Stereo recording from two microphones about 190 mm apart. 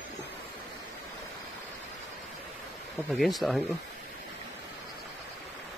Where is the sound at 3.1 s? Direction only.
Centre (ahead or behind).